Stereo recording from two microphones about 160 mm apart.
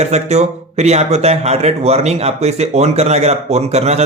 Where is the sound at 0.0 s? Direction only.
45° right (ahead or behind).